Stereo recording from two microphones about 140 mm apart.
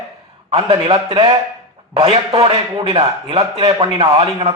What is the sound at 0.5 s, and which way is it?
A man's voice, 40° right (ahead or behind).